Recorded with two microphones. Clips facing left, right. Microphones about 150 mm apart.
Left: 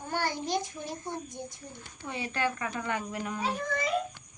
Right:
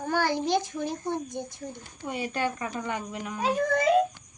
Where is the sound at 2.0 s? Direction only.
25° right (ahead or behind).